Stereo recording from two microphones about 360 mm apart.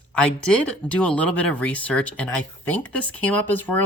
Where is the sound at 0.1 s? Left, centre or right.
Centre.